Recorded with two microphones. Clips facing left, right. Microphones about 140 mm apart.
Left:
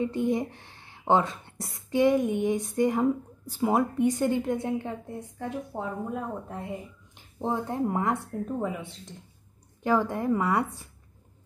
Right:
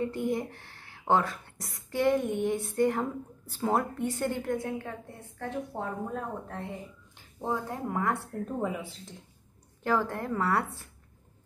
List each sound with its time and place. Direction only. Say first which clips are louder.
0.0 s speech: left 3 dB; 20° left (ahead or behind)
5.4 s speech: even; 10° left (ahead or behind)
7.4 s speech: left 4 dB; 25° left (ahead or behind)
8.3 s speech: left 2 dB; centre (ahead or behind)
9.8 s speech: left 4 dB; 15° left (ahead or behind)